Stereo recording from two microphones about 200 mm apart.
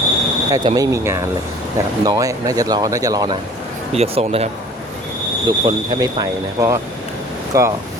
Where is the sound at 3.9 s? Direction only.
30° right (ahead or behind).